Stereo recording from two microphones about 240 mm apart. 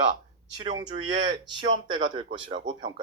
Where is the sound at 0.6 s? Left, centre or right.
Centre.